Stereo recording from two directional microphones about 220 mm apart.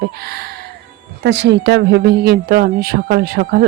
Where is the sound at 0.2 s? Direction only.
45° right (ahead or behind).